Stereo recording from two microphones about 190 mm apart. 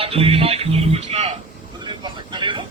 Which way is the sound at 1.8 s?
25° right (ahead or behind).